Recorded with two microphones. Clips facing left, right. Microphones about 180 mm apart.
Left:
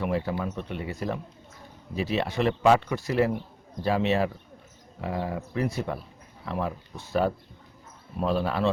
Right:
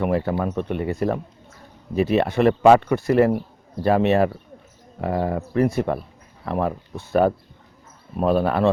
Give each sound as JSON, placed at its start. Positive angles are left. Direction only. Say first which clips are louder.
{"t": 0.0, "sound": "speech", "louder": "right 6 dB", "side_deg": -55}